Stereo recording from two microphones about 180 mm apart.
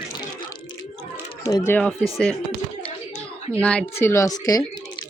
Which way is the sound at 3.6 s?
5° left (ahead or behind).